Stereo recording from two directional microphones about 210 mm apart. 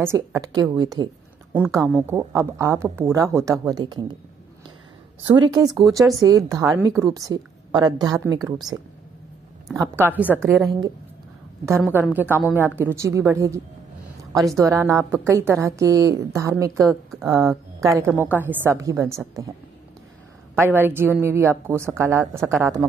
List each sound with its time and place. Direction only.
0.0 s a woman's voice: 15° right (ahead or behind)
1.5 s speech: 5° right (ahead or behind)
2.0 s a woman's voice: 15° right (ahead or behind)
5.2 s a woman's voice: 20° right (ahead or behind)
9.8 s a woman's voice: 10° right (ahead or behind)
14.6 s a woman's voice: 15° right (ahead or behind)
20.5 s a woman's voice: 10° right (ahead or behind)